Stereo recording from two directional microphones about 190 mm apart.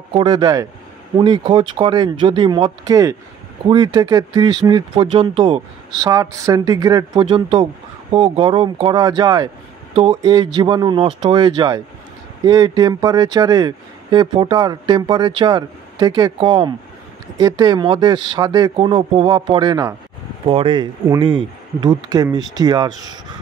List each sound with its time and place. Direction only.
0.1 s speech: 25° right (ahead or behind)
20.4 s speech: 30° right (ahead or behind)